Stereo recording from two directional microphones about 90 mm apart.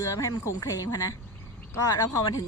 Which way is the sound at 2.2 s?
45° left (ahead or behind).